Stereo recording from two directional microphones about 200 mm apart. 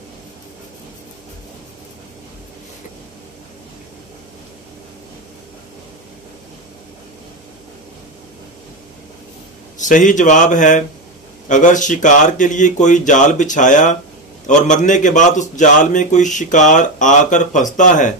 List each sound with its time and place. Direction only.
9.8 s a man's voice: 40° left (ahead or behind)